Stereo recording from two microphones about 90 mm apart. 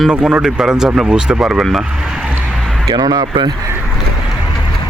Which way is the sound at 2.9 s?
45° right (ahead or behind).